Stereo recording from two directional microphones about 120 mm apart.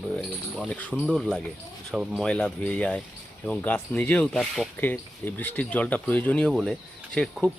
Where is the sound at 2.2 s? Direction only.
5° left (ahead or behind).